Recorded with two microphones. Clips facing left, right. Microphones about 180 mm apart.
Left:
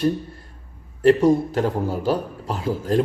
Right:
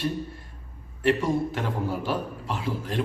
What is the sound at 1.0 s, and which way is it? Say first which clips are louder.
A man's voice: left 8 dB; 40° left (ahead or behind).